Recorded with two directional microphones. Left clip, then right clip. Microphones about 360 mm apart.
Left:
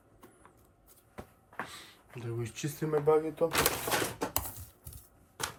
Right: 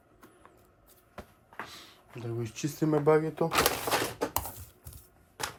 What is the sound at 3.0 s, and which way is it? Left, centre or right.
Speech, centre.